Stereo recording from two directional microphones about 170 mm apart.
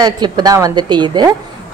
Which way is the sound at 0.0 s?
25° right (ahead or behind).